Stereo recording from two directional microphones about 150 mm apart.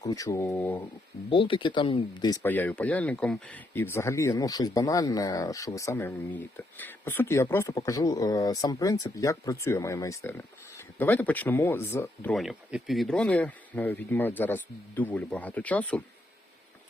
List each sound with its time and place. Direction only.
0.0 s speech: 25° left (ahead or behind)
1.3 s speech: 35° left (ahead or behind)
2.4 s speech: 10° left (ahead or behind)
12.3 s speech: centre (ahead or behind)